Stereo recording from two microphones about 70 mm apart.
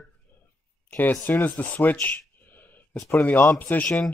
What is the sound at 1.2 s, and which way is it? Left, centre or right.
Speech, left.